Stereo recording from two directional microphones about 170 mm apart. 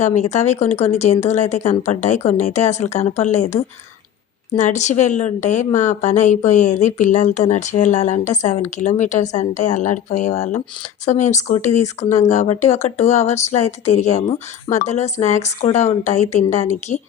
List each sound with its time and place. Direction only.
0.0 s a woman's voice: 45° left (ahead or behind)